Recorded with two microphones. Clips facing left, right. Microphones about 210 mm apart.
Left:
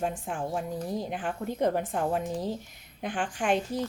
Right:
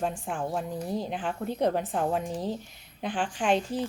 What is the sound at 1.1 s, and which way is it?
Speech, 50° left (ahead or behind).